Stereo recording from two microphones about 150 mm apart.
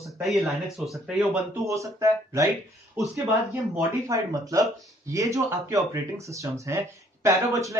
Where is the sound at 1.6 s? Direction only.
20° right (ahead or behind).